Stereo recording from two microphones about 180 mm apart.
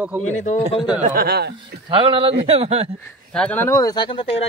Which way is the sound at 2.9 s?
5° left (ahead or behind).